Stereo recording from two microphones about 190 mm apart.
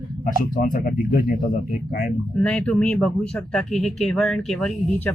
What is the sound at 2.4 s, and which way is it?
Speech, 5° left (ahead or behind).